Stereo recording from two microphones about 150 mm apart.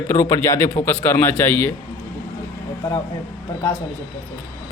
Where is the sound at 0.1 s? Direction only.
15° left (ahead or behind).